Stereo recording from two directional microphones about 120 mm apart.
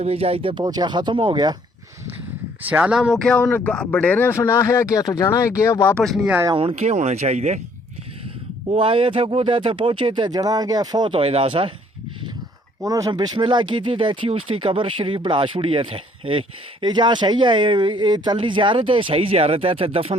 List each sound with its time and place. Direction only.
0.0 s speech: 55° right (ahead or behind)
0.6 s speech: 35° right (ahead or behind)
2.6 s speech: 15° right (ahead or behind)
3.1 s speech: 5° left (ahead or behind); by 5.9 s 25° left (ahead or behind)
5.9 s speech: 5° left (ahead or behind)
6.5 s speech: 50° right (ahead or behind); by 7.6 s 70° right (ahead or behind)
8.7 s speech: 50° right (ahead or behind)
12.8 s speech: 30° right (ahead or behind); by 20.1 s 55° right (ahead or behind)